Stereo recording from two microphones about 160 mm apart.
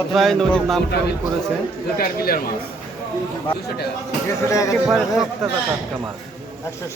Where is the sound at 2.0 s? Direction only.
70° left (ahead or behind).